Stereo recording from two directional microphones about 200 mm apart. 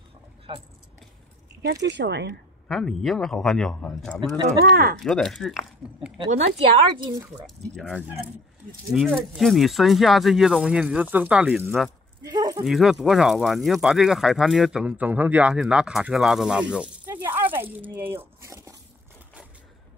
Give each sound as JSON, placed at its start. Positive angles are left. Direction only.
{"t": 0.5, "sound": "speech", "side_deg": -25}
{"t": 1.6, "sound": "speech", "side_deg": -55}
{"t": 2.7, "sound": "speech", "side_deg": 0}
{"t": 4.6, "sound": "speech", "side_deg": -50}
{"t": 5.0, "sound": "speech", "side_deg": 0}
{"t": 7.0, "sound": "speech", "side_deg": -20}
{"t": 7.7, "sound": "speech", "side_deg": 0}
{"t": 12.2, "sound": "a sound", "side_deg": -20}
{"t": 12.6, "sound": "speech", "side_deg": 0}